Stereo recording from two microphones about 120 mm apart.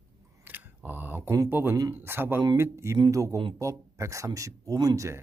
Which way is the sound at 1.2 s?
30° right (ahead or behind).